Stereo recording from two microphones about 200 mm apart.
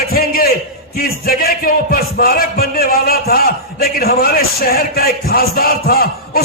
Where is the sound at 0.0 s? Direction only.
50° left (ahead or behind).